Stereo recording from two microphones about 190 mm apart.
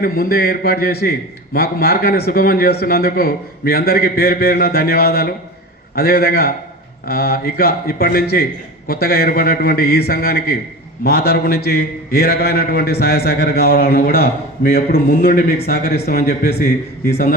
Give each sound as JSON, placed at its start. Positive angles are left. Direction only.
{"t": 0.0, "sound": "a man's voice", "side_deg": 50}